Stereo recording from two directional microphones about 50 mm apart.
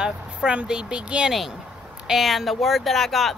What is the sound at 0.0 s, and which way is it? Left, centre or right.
A woman's voice, centre.